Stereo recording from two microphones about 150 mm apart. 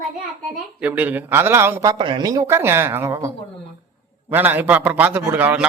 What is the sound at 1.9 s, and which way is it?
A man's voice, 30° right (ahead or behind).